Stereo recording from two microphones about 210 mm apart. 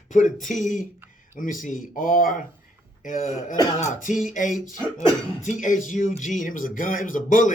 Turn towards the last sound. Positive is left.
turn(degrees=40)  # may be behind; listen again after turning